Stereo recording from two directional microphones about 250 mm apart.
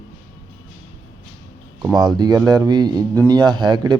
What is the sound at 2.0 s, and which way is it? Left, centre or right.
Speech, centre.